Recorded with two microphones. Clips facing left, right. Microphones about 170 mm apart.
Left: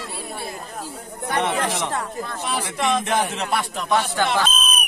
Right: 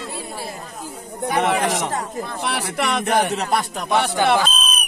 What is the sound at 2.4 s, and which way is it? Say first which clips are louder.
Speech: right 1 dB; 70° right (ahead or behind).